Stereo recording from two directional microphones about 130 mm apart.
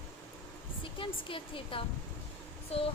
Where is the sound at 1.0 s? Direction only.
40° left (ahead or behind).